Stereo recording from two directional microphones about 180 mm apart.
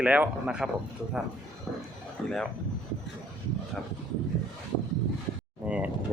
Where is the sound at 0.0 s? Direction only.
5° right (ahead or behind).